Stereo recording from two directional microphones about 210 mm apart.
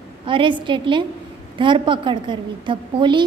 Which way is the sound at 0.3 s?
25° right (ahead or behind).